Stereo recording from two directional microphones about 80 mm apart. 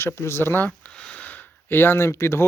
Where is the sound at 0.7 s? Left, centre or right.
Centre; by 2.4 s left.